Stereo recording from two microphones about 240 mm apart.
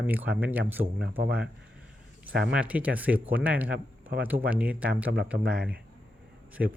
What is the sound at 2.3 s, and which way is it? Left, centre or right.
Speech, right.